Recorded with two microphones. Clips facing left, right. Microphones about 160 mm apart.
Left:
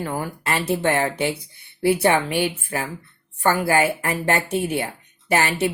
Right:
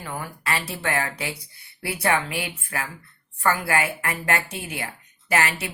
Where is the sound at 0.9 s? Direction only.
25° left (ahead or behind).